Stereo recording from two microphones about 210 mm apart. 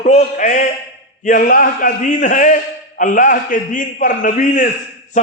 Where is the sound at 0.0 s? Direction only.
35° left (ahead or behind).